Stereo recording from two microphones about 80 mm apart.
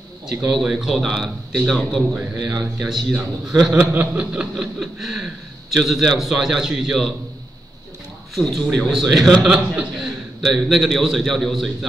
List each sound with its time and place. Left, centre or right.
0.3 s a man's voice: centre
2.8 s a man's voice: centre
3.7 s chuckle: right
4.6 s a man's voice: centre
8.4 s a man's voice: centre